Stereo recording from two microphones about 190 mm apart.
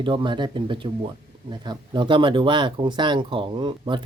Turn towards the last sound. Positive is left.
turn(degrees=-25)  # may be behind; listen again after turning